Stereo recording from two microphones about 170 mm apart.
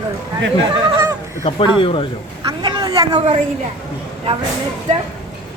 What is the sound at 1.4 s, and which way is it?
Speech, 35° left (ahead or behind).